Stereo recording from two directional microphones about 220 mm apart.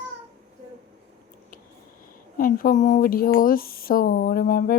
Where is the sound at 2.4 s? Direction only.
40° left (ahead or behind).